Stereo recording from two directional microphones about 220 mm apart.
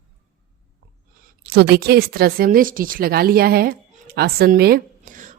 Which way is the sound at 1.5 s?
50° right (ahead or behind).